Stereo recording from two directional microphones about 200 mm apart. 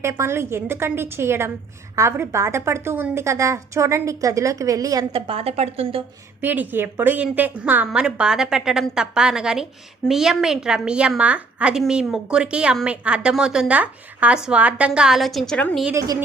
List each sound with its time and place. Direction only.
0.0 s a woman's voice: 15° right (ahead or behind)
5.1 s a woman's voice: 30° right (ahead or behind)
6.4 s a woman's voice: 10° right (ahead or behind)
15.9 s a woman's voice: 15° right (ahead or behind)